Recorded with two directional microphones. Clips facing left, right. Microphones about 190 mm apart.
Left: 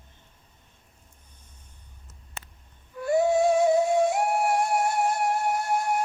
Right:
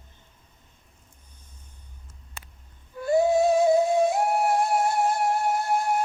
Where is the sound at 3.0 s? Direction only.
30° right (ahead or behind).